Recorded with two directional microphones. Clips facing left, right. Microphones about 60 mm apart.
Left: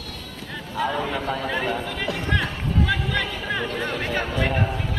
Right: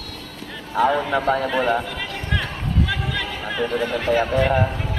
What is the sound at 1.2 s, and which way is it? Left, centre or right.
Speech, right.